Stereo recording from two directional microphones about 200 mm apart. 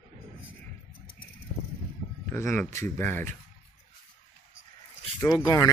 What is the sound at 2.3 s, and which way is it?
Speech, 10° left (ahead or behind).